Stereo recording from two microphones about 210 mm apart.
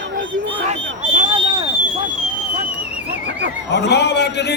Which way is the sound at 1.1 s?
25° right (ahead or behind).